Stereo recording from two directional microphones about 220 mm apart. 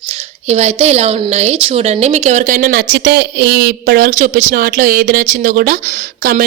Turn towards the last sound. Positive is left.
turn(degrees=-40)  # may be behind; listen again after turning